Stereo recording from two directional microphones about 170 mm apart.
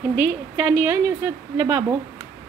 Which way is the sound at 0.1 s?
10° right (ahead or behind).